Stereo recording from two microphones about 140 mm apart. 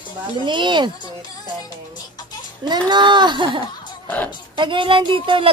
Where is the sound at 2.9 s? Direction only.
35° right (ahead or behind).